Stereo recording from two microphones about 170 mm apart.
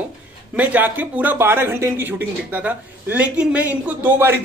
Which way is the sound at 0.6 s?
10° right (ahead or behind).